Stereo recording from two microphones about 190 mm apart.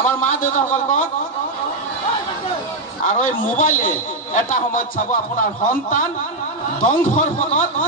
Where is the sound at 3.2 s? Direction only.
45° left (ahead or behind).